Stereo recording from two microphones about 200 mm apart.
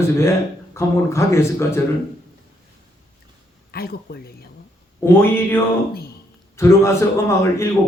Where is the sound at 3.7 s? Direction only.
50° left (ahead or behind).